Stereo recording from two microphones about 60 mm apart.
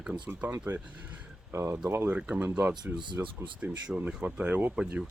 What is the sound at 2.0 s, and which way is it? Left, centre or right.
Speech, centre.